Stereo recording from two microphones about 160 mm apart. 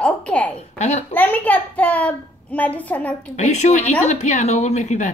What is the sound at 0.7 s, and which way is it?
Speech, 45° left (ahead or behind).